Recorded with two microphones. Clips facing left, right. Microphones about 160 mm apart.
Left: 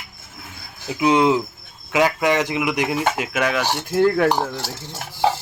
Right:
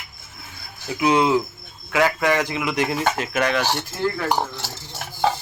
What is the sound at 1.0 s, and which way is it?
Speech, 20° left (ahead or behind).